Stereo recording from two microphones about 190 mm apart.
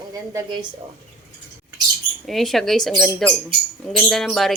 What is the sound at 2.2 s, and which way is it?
Speech, centre (ahead or behind).